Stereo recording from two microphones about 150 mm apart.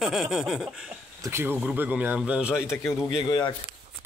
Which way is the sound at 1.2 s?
15° right (ahead or behind).